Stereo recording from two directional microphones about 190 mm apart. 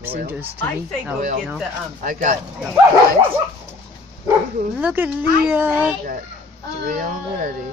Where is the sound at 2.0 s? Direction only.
45° right (ahead or behind).